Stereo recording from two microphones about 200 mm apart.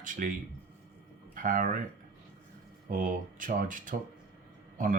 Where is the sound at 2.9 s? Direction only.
40° right (ahead or behind).